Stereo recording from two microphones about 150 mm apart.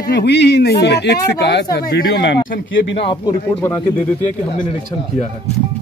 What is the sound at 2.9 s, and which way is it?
Speech, 40° left (ahead or behind).